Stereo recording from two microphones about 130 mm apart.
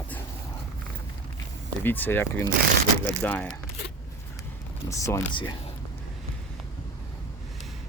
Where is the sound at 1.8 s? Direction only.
15° left (ahead or behind).